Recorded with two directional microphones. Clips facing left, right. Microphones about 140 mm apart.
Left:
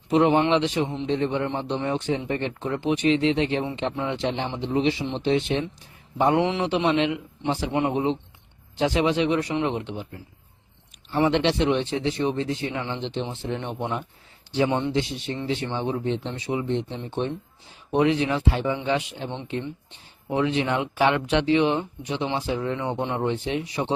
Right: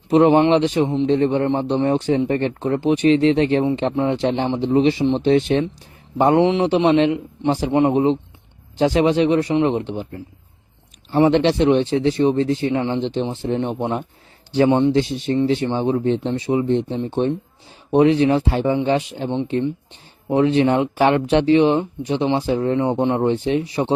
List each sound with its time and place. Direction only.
0.1 s speech: 40° right (ahead or behind)
6.4 s speech: 30° right (ahead or behind)
14.7 s speech: 30° right (ahead or behind)
14.9 s speech: 45° right (ahead or behind)
20.3 s speech: 40° right (ahead or behind)